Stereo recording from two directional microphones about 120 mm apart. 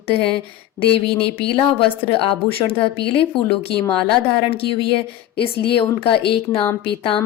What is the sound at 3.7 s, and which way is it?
Speech, 5° left (ahead or behind).